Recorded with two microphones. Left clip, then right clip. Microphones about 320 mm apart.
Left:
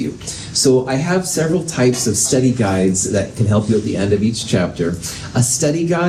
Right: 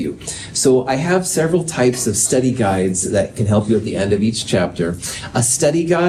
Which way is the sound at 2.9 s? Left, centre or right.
Right.